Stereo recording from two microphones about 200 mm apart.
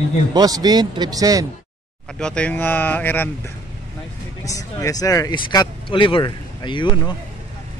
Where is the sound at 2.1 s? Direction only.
5° left (ahead or behind).